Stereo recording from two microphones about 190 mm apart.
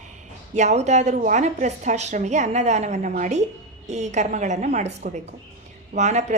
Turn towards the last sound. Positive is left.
turn(degrees=-35)  # may be behind; listen again after turning